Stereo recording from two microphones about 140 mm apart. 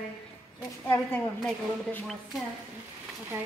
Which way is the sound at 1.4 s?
15° left (ahead or behind).